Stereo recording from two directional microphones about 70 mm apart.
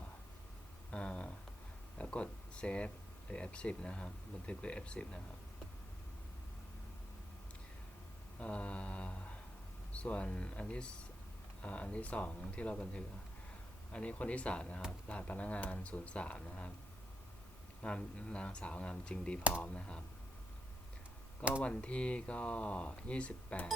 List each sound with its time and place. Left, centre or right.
0.9 s a sound: centre
2.0 s speech: centre
8.4 s speech: centre
17.8 s speech: centre
21.6 s speech: centre